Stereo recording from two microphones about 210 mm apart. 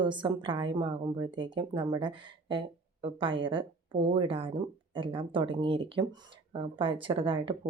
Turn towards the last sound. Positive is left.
turn(degrees=-25)  # may be behind; listen again after turning